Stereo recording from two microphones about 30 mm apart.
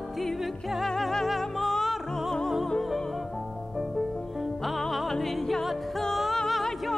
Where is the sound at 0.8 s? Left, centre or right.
Centre.